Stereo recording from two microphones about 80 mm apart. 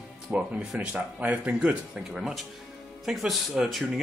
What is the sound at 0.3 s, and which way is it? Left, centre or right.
Speech, centre.